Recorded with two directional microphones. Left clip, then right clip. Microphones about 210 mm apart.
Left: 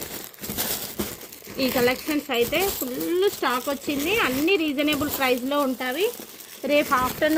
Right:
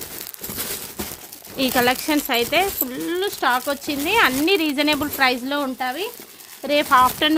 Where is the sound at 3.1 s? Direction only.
45° right (ahead or behind).